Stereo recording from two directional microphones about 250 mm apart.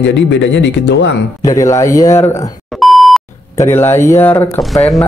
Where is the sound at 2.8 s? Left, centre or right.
Centre.